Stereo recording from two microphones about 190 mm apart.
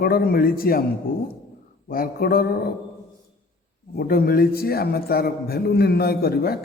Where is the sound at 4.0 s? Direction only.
50° left (ahead or behind).